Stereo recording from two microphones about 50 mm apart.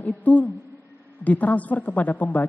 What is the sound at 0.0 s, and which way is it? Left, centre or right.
A woman's voice, left.